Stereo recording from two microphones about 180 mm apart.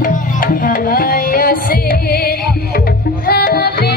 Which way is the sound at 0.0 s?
50° left (ahead or behind).